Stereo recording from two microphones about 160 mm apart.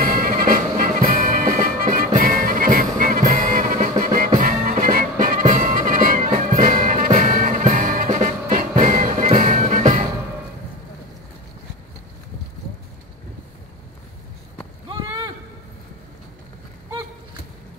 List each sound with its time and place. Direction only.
0.0 s music: 60° right (ahead or behind)